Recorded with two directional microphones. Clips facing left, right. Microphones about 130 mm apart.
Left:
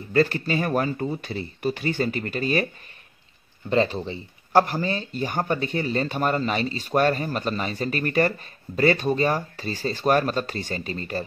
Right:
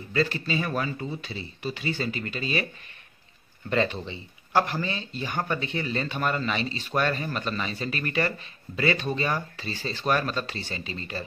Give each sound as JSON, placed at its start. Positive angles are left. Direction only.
{"t": 0.1, "sound": "speech", "side_deg": 50}
{"t": 3.7, "sound": "speech", "side_deg": 35}